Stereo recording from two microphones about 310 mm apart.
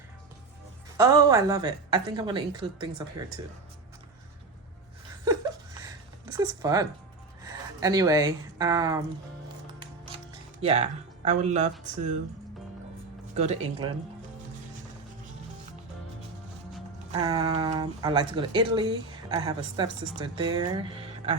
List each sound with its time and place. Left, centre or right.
0.9 s speech: centre
6.3 s speech: centre
10.6 s speech: centre
13.3 s speech: right
17.1 s speech: centre